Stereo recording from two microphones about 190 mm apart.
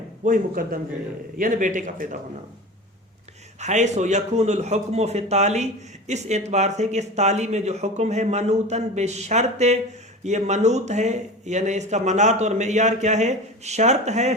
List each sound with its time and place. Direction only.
0.3 s speech: 45° right (ahead or behind)
3.6 s speech: 40° right (ahead or behind)